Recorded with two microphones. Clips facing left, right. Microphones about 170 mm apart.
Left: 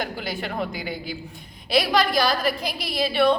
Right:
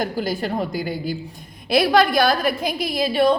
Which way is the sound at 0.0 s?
40° right (ahead or behind).